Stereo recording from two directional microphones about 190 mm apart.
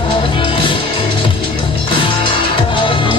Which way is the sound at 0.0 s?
25° left (ahead or behind).